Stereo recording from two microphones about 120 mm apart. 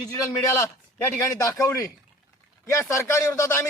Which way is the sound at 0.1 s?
30° left (ahead or behind).